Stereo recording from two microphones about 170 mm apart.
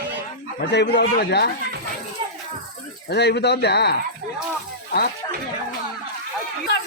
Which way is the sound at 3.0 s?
80° left.